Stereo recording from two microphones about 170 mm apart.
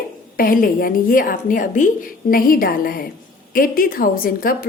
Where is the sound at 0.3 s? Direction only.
55° left (ahead or behind).